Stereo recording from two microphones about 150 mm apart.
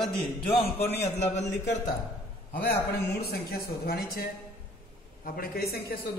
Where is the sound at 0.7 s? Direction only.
90° left.